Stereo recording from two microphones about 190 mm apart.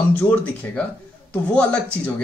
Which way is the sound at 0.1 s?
10° left (ahead or behind).